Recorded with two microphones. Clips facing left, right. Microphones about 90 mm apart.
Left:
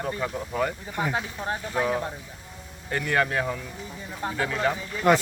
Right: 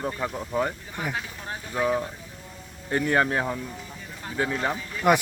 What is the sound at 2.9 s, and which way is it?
Speech, 30° right (ahead or behind).